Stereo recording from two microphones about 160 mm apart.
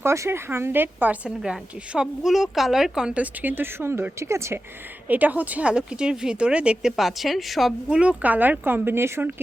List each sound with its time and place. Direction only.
0.0 s a woman's voice: 15° right (ahead or behind)